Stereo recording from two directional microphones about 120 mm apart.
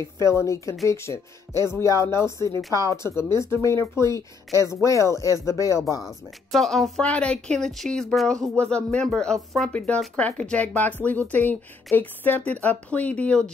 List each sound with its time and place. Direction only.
0.0 s speech: 25° left (ahead or behind)
6.5 s speech: centre (ahead or behind)